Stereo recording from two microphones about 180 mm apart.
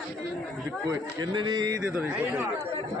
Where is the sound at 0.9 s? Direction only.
25° right (ahead or behind).